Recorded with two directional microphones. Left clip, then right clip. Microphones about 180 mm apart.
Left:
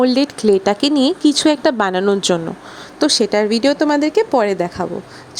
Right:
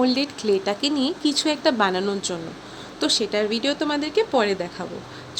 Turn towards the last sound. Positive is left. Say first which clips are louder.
# left 6 dB
turn(degrees=45)  # may be behind; listen again after turning